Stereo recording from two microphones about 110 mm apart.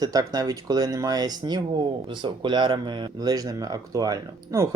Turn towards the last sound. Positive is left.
turn(degrees=-30)  # may be behind; listen again after turning